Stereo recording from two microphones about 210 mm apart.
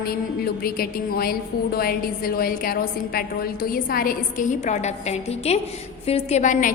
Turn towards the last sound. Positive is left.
turn(degrees=35)  # may be behind; listen again after turning